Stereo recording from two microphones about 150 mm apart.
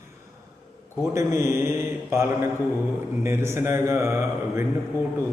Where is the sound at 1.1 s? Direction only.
20° right (ahead or behind).